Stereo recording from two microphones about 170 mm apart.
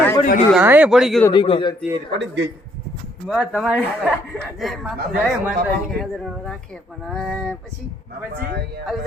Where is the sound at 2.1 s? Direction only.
90° right.